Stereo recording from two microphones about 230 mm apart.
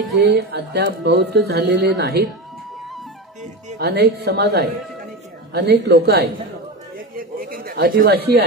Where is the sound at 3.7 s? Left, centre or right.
Right.